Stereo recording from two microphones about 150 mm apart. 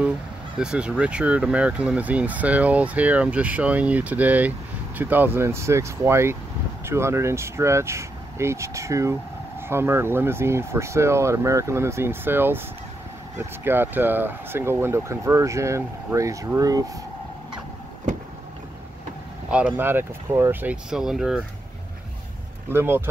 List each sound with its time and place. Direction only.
0.6 s speech: 5° right (ahead or behind); by 17.0 s 25° right (ahead or behind)
19.5 s speech: 10° right (ahead or behind)
20.7 s speech: 5° right (ahead or behind)
22.7 s speech: 15° right (ahead or behind)